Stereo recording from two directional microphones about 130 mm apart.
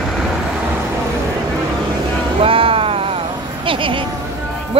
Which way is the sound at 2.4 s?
45° right (ahead or behind).